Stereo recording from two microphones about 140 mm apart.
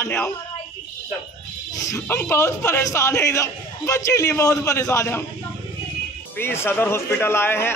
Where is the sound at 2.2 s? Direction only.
20° left (ahead or behind).